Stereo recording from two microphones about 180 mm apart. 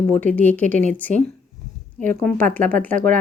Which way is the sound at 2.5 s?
10° left (ahead or behind).